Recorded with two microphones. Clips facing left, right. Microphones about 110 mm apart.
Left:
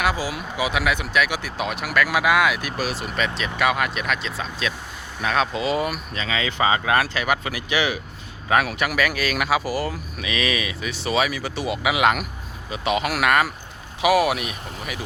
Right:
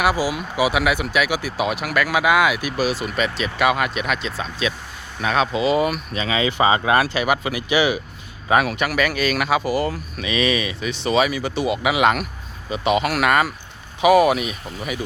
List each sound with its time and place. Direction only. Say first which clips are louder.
0.0 s speech: right 4 dB; 10° right (ahead or behind)
6.1 s speech: right 4 dB; 15° right (ahead or behind)
7.0 s speech: right 3 dB; 5° right (ahead or behind)